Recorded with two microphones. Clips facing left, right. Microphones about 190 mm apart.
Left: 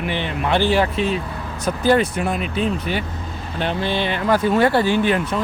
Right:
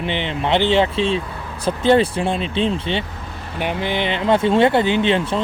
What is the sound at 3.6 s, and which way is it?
Speech, 15° right (ahead or behind).